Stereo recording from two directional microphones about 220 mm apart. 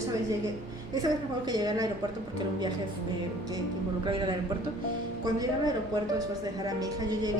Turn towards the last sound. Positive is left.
turn(degrees=-20)  # may be behind; listen again after turning